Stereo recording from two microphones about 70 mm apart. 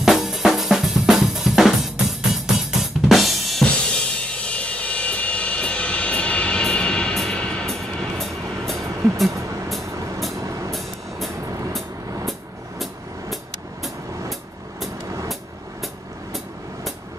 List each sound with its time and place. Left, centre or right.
0.0 s drum kit: centre
4.2 s vehicle: centre
10.4 s vehicle: right